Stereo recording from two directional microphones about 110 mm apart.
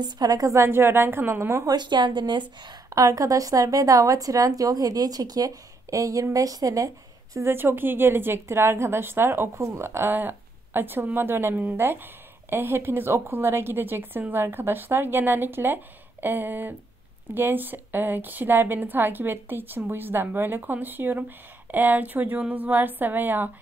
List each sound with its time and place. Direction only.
0.0 s a woman's voice: 35° right (ahead or behind)
1.8 s speech: 45° right (ahead or behind)
2.6 s a woman's voice: 30° right (ahead or behind)
7.3 s a woman's voice: 20° right (ahead or behind)